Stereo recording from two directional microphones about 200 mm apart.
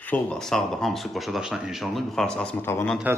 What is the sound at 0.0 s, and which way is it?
Speech, 5° left (ahead or behind).